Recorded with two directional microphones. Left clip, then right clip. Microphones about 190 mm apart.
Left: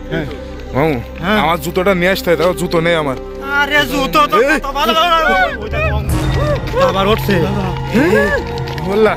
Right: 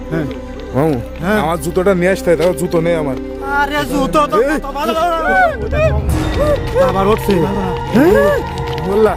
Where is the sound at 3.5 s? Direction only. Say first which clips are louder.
Left 3 dB; 30° right (ahead or behind).